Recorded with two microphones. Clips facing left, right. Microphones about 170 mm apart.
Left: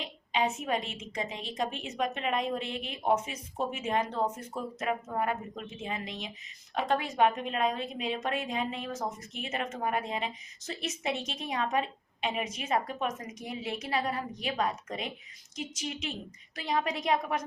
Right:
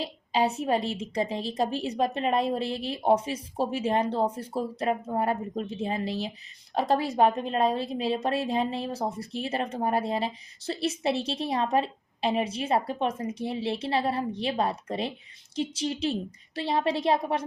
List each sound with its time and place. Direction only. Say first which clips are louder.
0.0 s a woman's voice: right 4 dB; 35° right (ahead or behind)